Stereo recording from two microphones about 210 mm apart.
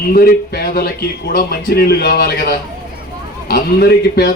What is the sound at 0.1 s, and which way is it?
Speech, 45° left (ahead or behind).